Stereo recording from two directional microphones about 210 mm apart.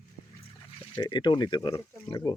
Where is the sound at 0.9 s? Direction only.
20° left (ahead or behind).